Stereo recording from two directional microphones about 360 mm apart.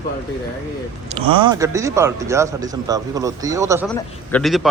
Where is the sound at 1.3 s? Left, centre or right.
Centre.